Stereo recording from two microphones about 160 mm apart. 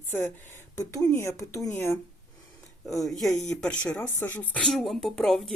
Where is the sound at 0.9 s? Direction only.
20° left (ahead or behind).